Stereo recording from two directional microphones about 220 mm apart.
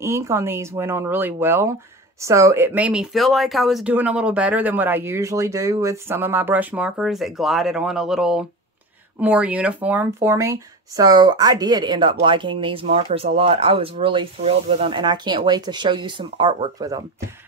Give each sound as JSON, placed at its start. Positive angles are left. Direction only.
{"t": 0.0, "sound": "speech", "side_deg": -10}